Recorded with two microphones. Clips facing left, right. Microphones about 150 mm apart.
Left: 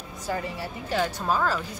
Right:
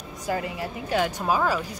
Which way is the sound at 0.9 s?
10° right (ahead or behind).